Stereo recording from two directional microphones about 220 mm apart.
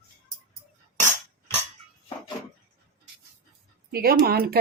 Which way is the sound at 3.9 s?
45° right (ahead or behind).